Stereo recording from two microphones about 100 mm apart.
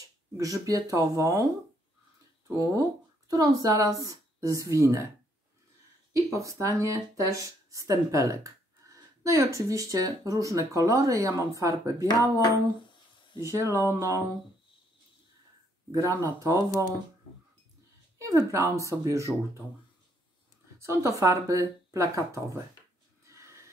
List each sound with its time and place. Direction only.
0.4 s speech: 35° right (ahead or behind)
2.4 s speech: 35° right (ahead or behind)
6.1 s speech: 30° right (ahead or behind)
12.4 s a sound: 50° left (ahead or behind)
13.4 s speech: 30° right (ahead or behind)
15.9 s speech: 30° right (ahead or behind)
18.2 s speech: 30° right (ahead or behind)
20.8 s speech: 30° right (ahead or behind)
23.2 s a sound: 30° right (ahead or behind)